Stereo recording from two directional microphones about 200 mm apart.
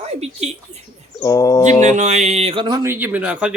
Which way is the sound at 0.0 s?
35° right (ahead or behind).